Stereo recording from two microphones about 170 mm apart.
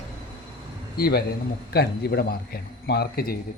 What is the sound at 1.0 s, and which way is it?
A man's voice, 65° left (ahead or behind).